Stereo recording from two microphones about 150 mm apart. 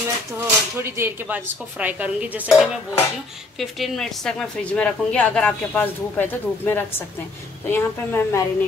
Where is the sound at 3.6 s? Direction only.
Centre (ahead or behind).